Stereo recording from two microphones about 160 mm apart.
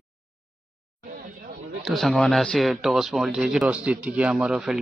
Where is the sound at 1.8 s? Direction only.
Centre (ahead or behind).